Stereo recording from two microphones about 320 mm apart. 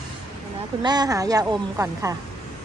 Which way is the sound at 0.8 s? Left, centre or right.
Centre.